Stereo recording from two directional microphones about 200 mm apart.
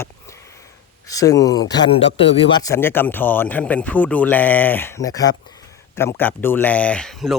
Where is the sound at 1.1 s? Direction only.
15° left (ahead or behind).